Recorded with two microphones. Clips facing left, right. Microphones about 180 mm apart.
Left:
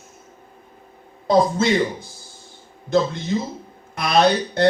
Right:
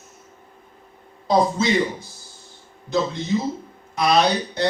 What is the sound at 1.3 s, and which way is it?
Speech, 55° left (ahead or behind).